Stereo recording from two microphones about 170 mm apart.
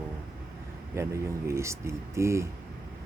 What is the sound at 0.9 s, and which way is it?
Speech, 15° right (ahead or behind).